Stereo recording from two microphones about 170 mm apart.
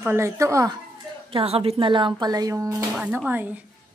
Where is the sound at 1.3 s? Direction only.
35° right (ahead or behind); by 3.6 s 10° right (ahead or behind).